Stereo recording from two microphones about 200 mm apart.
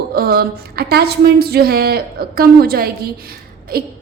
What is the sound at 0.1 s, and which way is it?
A woman's voice, 50° right (ahead or behind).